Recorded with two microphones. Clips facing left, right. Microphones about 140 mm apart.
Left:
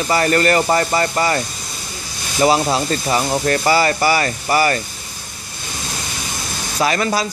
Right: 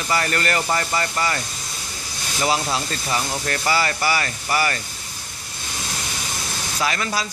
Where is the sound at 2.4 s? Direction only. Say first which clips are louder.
Left 7 dB; 35° left (ahead or behind).